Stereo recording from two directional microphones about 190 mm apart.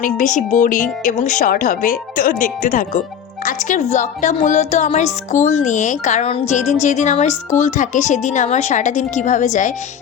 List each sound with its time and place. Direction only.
0.0 s speech: 40° left (ahead or behind)